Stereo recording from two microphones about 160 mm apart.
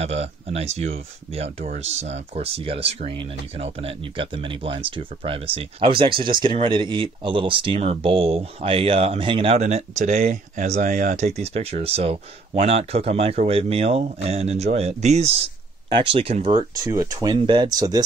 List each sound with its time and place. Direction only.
0.0 s speech: 40° right (ahead or behind)
16.8 s speech: 20° right (ahead or behind)